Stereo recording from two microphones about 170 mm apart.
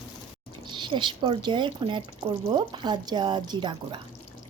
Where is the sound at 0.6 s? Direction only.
25° right (ahead or behind).